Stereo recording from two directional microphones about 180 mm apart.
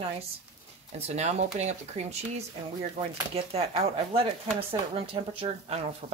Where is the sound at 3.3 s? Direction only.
35° right (ahead or behind).